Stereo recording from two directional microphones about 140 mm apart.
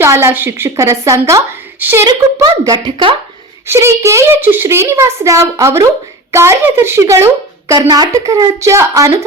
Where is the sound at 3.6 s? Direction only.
20° right (ahead or behind).